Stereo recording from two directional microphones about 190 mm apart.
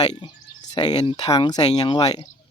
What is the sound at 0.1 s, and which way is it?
Speech, 25° left (ahead or behind).